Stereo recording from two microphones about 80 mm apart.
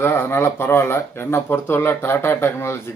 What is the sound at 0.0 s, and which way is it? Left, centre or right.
A man's voice, left.